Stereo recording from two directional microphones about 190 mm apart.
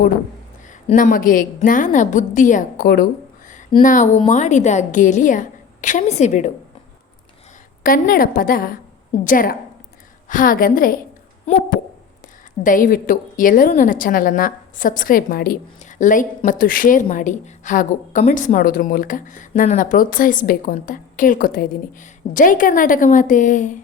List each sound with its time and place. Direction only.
0.7 s a woman's voice: 40° left (ahead or behind)
7.9 s a woman's voice: 45° left (ahead or behind)
12.6 s a woman's voice: 45° left (ahead or behind)
15.8 s a sound: 40° left (ahead or behind)
16.5 s a woman's voice: 50° left (ahead or behind)